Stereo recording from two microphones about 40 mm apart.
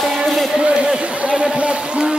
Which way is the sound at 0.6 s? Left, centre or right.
Right.